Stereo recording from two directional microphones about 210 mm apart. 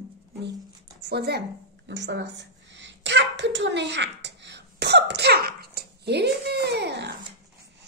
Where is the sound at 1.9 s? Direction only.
55° right (ahead or behind).